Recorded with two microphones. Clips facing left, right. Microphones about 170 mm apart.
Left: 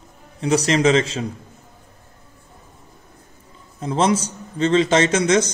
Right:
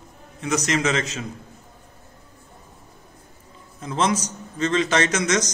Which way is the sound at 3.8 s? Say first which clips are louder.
Left 4 dB; 30° left (ahead or behind).